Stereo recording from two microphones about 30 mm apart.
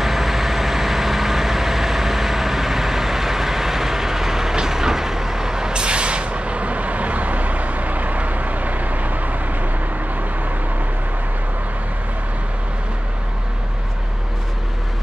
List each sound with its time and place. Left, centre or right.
0.0 s vehicle: centre; by 9.7 s right